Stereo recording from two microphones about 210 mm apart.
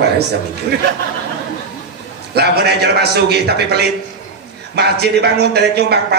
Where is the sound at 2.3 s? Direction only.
50° right (ahead or behind).